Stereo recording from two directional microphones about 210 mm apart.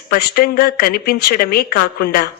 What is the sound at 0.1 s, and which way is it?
Speech, 45° left (ahead or behind).